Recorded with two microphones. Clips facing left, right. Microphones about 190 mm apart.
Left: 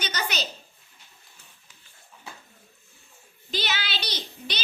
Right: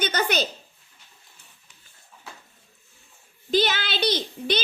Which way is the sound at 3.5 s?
50° right (ahead or behind).